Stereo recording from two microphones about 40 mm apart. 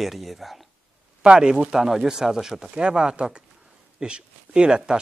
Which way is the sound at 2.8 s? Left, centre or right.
Right.